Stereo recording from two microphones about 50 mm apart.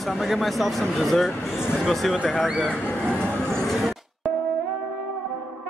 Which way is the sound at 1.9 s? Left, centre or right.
Centre.